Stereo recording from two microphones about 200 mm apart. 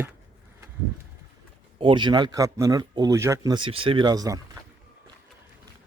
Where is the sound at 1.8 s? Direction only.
25° right (ahead or behind).